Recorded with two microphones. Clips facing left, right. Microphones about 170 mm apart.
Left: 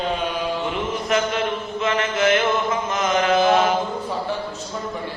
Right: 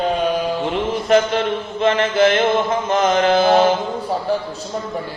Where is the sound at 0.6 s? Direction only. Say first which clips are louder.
Right 4 dB; 35° right (ahead or behind).